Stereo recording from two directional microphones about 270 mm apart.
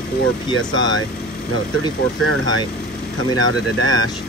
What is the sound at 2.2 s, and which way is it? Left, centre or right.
Speech, right.